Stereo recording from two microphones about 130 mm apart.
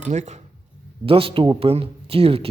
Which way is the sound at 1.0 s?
45° right (ahead or behind).